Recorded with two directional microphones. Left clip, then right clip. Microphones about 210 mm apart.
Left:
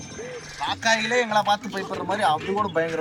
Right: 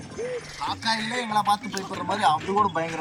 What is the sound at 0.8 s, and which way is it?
Speech, 30° left (ahead or behind).